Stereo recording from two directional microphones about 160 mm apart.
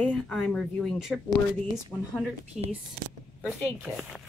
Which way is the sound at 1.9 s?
10° left (ahead or behind).